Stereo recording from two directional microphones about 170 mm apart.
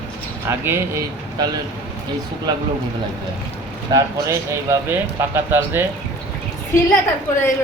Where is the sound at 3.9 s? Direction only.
15° right (ahead or behind).